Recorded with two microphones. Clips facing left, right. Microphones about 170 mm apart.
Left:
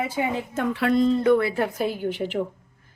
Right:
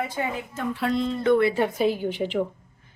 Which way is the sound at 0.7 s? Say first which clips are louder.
Left 3 dB; 70° left (ahead or behind).